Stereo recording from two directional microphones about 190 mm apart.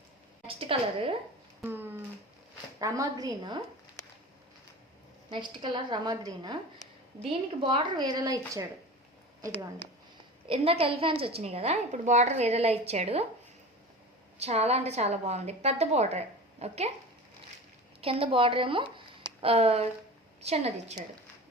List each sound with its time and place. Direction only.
0.4 s a woman's voice: 30° right (ahead or behind)
1.6 s a woman's voice: 10° right (ahead or behind)
5.3 s a woman's voice: 25° right (ahead or behind)
10.5 s a woman's voice: 30° right (ahead or behind)
14.3 s a woman's voice: 35° right (ahead or behind)
18.0 s a woman's voice: 30° right (ahead or behind)